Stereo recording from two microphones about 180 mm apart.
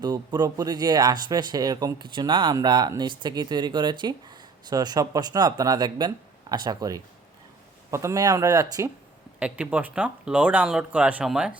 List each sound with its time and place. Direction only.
0.0 s speech: 20° right (ahead or behind)
9.4 s speech: 10° right (ahead or behind)